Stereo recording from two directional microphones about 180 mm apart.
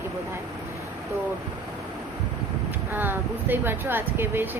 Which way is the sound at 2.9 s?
10° right (ahead or behind).